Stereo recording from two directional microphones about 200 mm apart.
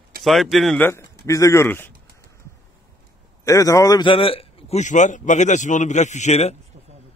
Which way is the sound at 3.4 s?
15° left (ahead or behind).